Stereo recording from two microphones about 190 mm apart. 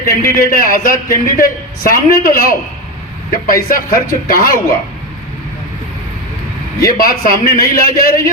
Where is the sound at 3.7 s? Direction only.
50° left (ahead or behind).